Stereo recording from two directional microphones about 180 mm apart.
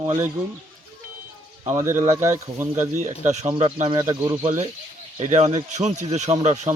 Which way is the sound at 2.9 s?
40° right (ahead or behind).